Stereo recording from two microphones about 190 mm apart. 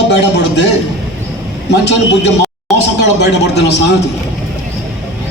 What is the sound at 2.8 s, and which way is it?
Speech, 65° left (ahead or behind).